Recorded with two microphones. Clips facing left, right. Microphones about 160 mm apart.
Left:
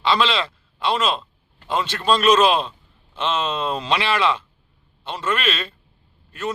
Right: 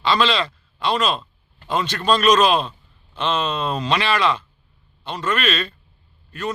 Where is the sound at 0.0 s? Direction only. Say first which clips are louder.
Right 1 dB; 20° left (ahead or behind).